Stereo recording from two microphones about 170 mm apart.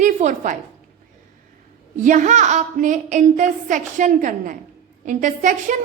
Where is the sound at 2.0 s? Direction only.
45° right (ahead or behind).